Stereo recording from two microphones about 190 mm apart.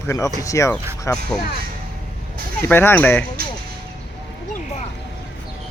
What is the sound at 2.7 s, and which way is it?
Speech, 10° left (ahead or behind).